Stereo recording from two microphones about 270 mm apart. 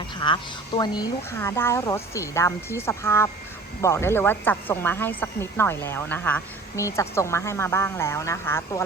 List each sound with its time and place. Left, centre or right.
0.2 s speech: centre